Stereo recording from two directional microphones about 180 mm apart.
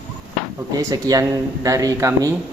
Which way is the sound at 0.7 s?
20° right (ahead or behind).